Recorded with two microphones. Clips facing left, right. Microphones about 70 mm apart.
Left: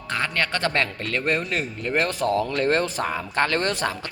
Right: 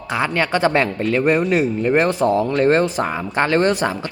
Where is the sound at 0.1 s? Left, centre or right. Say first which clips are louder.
Right 6 dB; centre.